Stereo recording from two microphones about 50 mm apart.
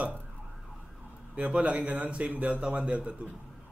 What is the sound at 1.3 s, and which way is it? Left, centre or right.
Speech, right.